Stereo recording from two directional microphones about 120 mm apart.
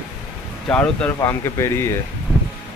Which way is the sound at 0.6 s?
10° left (ahead or behind).